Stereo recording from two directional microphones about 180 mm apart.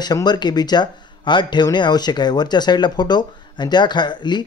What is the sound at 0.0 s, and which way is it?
Speech, 25° left (ahead or behind).